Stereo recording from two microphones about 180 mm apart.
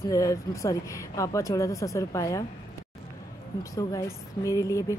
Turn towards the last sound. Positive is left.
turn(degrees=15)  # may be behind; listen again after turning